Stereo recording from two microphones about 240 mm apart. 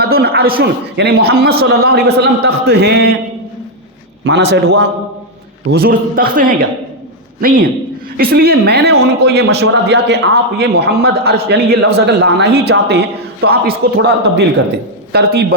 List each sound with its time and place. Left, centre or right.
0.0 s a man's voice: right
4.2 s a man's voice: right